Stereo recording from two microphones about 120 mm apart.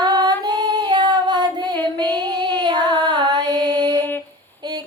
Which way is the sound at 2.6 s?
35° right (ahead or behind).